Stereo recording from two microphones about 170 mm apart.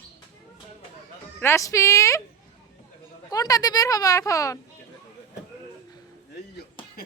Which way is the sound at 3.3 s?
20° left (ahead or behind).